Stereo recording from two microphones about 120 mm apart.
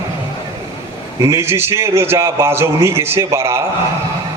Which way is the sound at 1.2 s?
25° right (ahead or behind).